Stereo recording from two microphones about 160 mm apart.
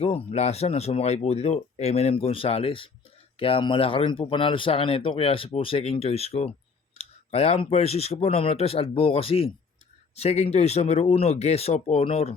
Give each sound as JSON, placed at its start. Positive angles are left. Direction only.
{"t": 0.0, "sound": "speech", "side_deg": 40}